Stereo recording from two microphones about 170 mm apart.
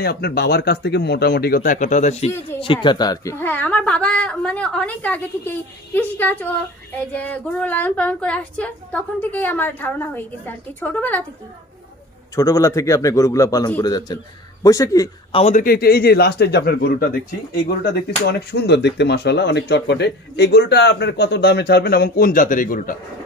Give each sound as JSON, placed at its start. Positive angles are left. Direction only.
{"t": 0.0, "sound": "a man's voice", "side_deg": 70}
{"t": 2.6, "sound": "speech", "side_deg": 30}
{"t": 12.4, "sound": "a man's voice", "side_deg": 20}
{"t": 15.3, "sound": "a man's voice", "side_deg": 40}
{"t": 15.6, "sound": "a man's voice", "side_deg": 65}
{"t": 17.8, "sound": "a man's voice", "side_deg": 70}